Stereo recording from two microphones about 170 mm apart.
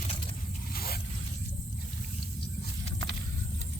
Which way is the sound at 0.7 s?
65° left (ahead or behind).